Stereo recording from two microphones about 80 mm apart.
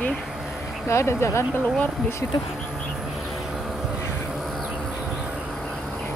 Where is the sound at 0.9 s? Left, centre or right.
Left.